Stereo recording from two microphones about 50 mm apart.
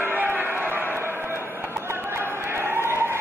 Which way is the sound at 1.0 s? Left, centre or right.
Right.